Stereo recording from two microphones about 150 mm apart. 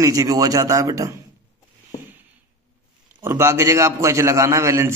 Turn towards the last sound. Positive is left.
turn(degrees=-20)  # may be behind; listen again after turning